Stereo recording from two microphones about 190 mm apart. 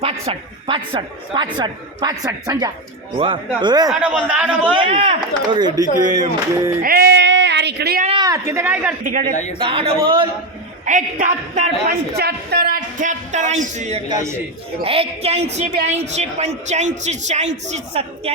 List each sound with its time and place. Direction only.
0.0 s a woman's voice: 30° right (ahead or behind)
4.0 s a man's voice: 5° right (ahead or behind)
4.7 s a woman's voice: 30° right (ahead or behind)
6.8 s a sound: 55° right (ahead or behind)
8.2 s a man's voice: 15° right (ahead or behind)
9.0 s a woman's voice: 45° right (ahead or behind)
9.3 s speech: 35° left (ahead or behind)
9.6 s a woman's voice: 30° right (ahead or behind)
10.8 s a woman's voice: 40° right (ahead or behind)
12.1 s a woman's voice: 55° right (ahead or behind); by 18.0 s 35° right (ahead or behind)